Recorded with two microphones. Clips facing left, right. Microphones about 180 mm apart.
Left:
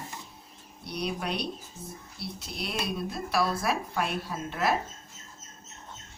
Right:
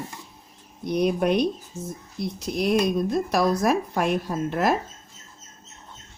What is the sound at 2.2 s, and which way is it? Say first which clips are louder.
Speech: right 12 dB; 45° right (ahead or behind).